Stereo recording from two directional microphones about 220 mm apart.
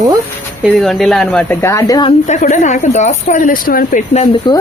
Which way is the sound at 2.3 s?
30° left (ahead or behind).